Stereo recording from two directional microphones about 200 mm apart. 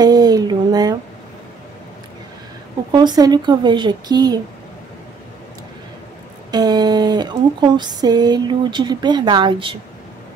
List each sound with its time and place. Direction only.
0.0 s a sound: 20° right (ahead or behind)
2.9 s a woman's voice: 20° right (ahead or behind)
6.5 s speech: 20° right (ahead or behind)